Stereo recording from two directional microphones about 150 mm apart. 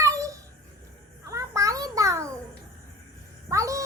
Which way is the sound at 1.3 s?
20° right (ahead or behind).